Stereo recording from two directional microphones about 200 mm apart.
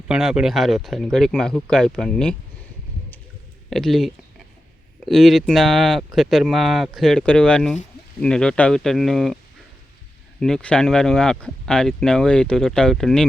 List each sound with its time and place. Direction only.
0.1 s speech: 5° right (ahead or behind)
3.7 s speech: centre (ahead or behind)
10.4 s speech: 5° left (ahead or behind)